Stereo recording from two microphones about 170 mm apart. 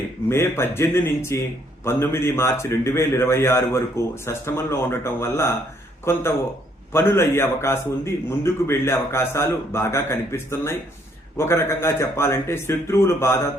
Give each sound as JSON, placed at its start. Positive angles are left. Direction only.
{"t": 0.3, "sound": "a man's voice", "side_deg": 15}